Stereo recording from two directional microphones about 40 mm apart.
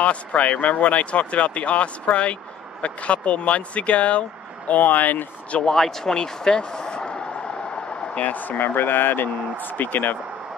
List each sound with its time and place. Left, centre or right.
0.0 s speech: left
5.8 s speech: centre
6.1 s speech: centre
8.2 s speech: left